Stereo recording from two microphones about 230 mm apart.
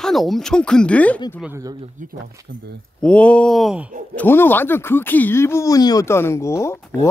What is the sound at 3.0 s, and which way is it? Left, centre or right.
Speech, centre.